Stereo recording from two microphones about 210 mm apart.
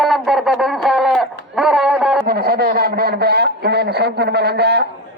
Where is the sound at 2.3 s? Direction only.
45° right (ahead or behind).